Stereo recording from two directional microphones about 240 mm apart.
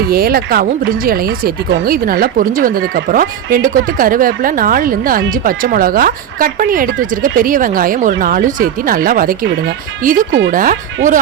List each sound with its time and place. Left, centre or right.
0.1 s speech: right